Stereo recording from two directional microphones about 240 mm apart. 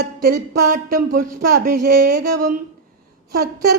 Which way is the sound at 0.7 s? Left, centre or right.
Right.